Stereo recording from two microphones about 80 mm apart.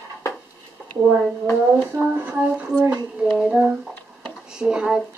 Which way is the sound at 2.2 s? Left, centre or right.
Centre.